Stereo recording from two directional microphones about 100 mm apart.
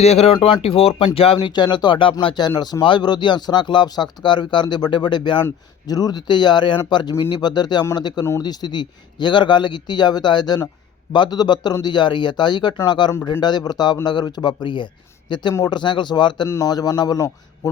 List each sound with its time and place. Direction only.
0.0 s speech: 90° left
0.4 s speech: 70° left (ahead or behind)
1.5 s a man's voice: 50° left (ahead or behind); by 17.7 s 35° left (ahead or behind)